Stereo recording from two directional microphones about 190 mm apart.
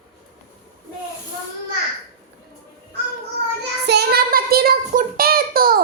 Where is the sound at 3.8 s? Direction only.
60° right (ahead or behind).